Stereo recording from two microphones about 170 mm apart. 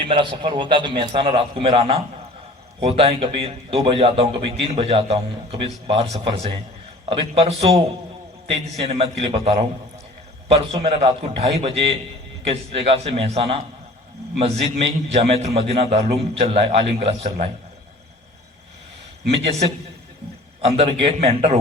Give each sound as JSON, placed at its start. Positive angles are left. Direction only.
{"t": 0.1, "sound": "a man's voice", "side_deg": -30}
{"t": 8.8, "sound": "a man's voice", "side_deg": -35}
{"t": 19.3, "sound": "a man's voice", "side_deg": -35}